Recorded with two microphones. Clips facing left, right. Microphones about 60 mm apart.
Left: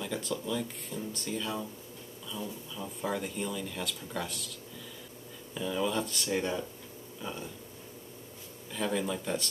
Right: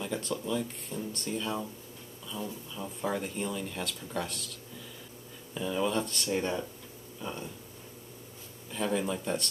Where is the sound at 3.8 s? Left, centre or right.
Centre.